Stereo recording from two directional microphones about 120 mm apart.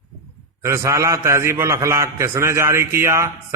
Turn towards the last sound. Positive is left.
turn(degrees=-20)  # may be behind; listen again after turning